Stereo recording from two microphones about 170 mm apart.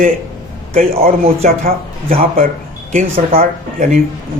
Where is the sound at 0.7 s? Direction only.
35° right (ahead or behind).